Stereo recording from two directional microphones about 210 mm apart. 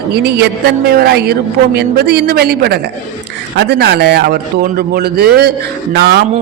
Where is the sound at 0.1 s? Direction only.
50° right (ahead or behind).